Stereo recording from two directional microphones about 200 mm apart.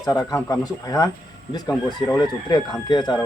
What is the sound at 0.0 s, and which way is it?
Speech, 20° left (ahead or behind).